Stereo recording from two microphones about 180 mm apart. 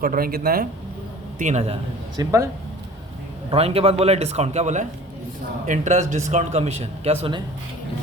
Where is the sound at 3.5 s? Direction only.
35° right (ahead or behind).